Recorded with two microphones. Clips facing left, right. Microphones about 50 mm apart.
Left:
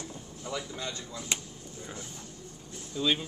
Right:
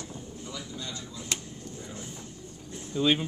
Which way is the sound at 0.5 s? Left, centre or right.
Left.